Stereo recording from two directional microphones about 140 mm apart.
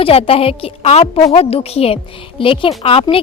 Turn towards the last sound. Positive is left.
turn(degrees=45)  # may be behind; listen again after turning